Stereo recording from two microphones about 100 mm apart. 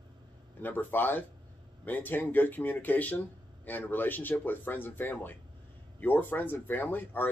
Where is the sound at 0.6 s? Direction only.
20° left (ahead or behind).